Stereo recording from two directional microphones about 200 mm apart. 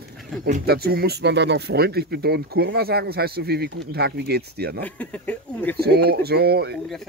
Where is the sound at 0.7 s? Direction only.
50° right (ahead or behind).